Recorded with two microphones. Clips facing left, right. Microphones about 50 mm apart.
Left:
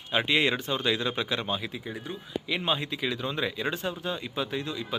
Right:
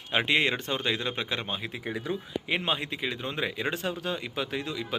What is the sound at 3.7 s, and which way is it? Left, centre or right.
Speech, right.